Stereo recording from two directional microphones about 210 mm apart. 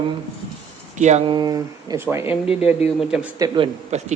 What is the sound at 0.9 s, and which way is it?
Speech, 35° right (ahead or behind).